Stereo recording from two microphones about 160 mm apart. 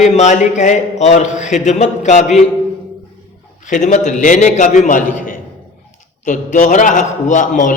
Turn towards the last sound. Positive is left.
turn(degrees=50)  # may be behind; listen again after turning